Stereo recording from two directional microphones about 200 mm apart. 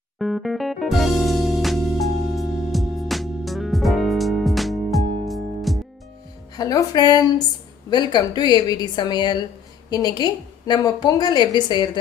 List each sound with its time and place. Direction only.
0.2 s music: centre (ahead or behind)
6.6 s a woman's voice: 20° left (ahead or behind)